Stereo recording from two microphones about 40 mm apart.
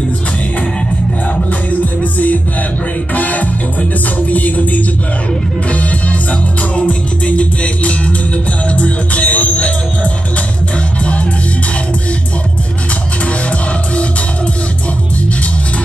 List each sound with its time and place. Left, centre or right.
2.1 s music: left